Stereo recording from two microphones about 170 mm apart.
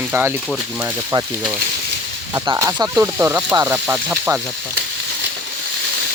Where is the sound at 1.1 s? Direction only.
25° right (ahead or behind).